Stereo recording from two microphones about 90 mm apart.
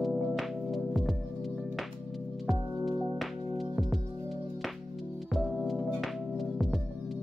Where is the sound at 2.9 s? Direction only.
Centre (ahead or behind).